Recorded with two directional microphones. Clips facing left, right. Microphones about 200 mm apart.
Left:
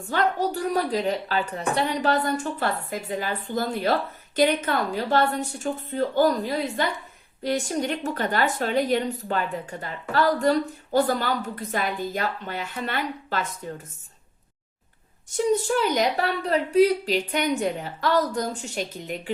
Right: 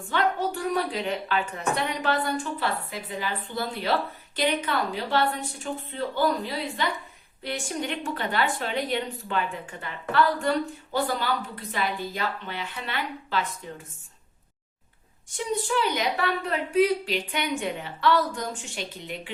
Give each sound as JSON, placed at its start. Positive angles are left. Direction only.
{"t": 0.0, "sound": "a woman's voice", "side_deg": 40}
{"t": 15.3, "sound": "a woman's voice", "side_deg": 40}